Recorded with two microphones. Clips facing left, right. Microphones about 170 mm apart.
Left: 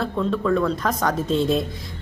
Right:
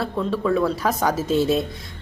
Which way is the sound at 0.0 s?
5° right (ahead or behind).